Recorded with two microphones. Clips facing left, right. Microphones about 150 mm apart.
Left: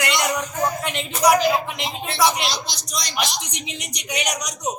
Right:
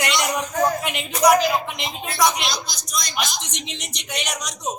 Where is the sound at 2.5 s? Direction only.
30° left (ahead or behind).